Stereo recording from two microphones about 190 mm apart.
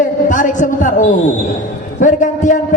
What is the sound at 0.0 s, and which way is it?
A man's voice, 40° left (ahead or behind).